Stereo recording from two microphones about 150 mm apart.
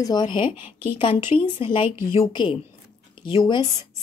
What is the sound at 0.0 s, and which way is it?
A woman's voice, 30° left (ahead or behind).